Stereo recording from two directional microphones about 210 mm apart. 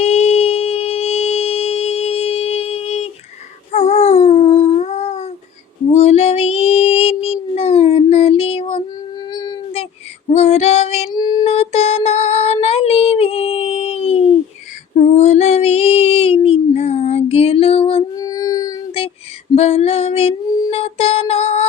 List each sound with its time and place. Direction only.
0.0 s a sound: 30° left (ahead or behind)
3.7 s dog: 30° left (ahead or behind)
5.9 s child singing: 30° left (ahead or behind)
9.3 s a sound: 20° left (ahead or behind)
10.3 s female singing: 30° left (ahead or behind)
14.9 s child singing: 30° left (ahead or behind)
19.5 s female singing: 30° left (ahead or behind)